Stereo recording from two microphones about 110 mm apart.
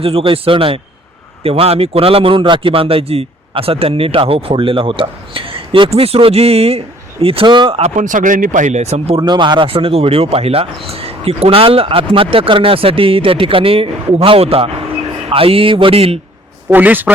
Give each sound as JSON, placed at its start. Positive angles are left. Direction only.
{"t": 0.0, "sound": "a man's voice", "side_deg": -60}
{"t": 8.6, "sound": "speech", "side_deg": -90}
{"t": 9.1, "sound": "a man's voice", "side_deg": -45}
{"t": 16.6, "sound": "speech", "side_deg": -15}